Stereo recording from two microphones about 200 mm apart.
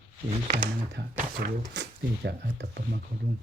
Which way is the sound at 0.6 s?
45° right (ahead or behind).